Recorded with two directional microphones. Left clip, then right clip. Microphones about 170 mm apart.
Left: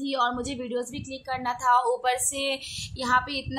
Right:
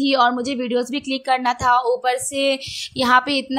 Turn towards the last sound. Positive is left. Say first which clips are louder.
# right 8 dB
turn(degrees=-40)  # may be behind; listen again after turning